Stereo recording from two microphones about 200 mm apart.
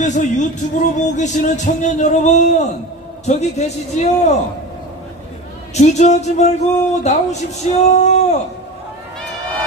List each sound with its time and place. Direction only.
0.0 s speech: 35° left (ahead or behind)
5.8 s speech: 35° left (ahead or behind)